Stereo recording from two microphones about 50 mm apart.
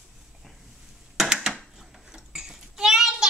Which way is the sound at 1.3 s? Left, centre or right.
Centre.